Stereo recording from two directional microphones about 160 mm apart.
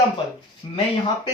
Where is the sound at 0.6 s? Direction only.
30° left (ahead or behind).